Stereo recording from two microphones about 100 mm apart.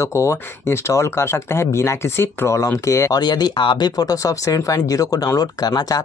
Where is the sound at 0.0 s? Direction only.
30° left (ahead or behind).